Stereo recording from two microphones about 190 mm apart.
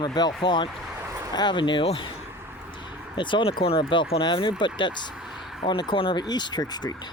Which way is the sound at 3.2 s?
25° left (ahead or behind).